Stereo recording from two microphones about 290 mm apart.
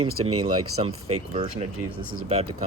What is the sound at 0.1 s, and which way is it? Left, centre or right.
Speech, right.